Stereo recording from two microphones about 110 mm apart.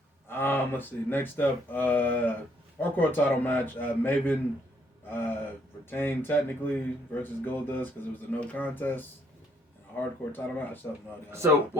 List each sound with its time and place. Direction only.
0.3 s speech: 20° left (ahead or behind)
5.0 s gasp: 20° left (ahead or behind)
5.9 s speech: 20° left (ahead or behind)
11.3 s speech: 25° right (ahead or behind)